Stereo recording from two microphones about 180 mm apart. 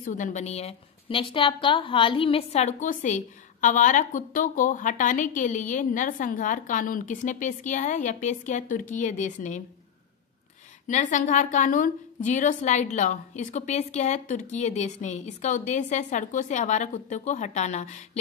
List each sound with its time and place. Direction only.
0.0 s a woman's voice: 45° left (ahead or behind)
10.9 s a woman's voice: 45° left (ahead or behind)